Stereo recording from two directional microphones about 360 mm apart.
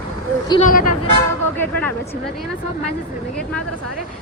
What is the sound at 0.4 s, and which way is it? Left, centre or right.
Speech, centre.